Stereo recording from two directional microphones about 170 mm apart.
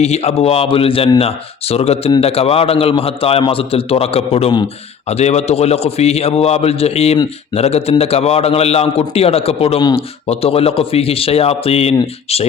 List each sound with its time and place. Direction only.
0.0 s a man's voice: 40° left (ahead or behind)